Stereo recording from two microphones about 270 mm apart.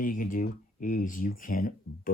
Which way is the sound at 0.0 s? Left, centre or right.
Left.